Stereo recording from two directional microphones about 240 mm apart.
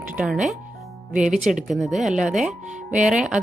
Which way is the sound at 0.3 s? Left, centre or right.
Right.